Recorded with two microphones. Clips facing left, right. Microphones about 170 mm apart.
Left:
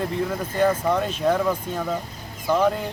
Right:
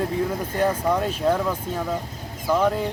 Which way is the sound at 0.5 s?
10° right (ahead or behind).